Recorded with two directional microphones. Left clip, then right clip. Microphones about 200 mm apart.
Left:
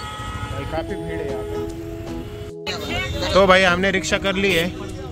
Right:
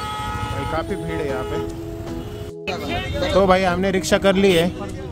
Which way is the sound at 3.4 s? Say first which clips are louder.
Left 3 dB; 5° right (ahead or behind).